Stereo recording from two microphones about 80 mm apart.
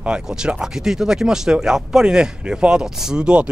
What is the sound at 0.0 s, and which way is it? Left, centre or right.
Speech, centre.